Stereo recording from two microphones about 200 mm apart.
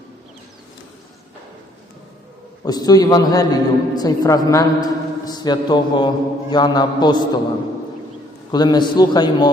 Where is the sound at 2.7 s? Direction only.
20° left (ahead or behind).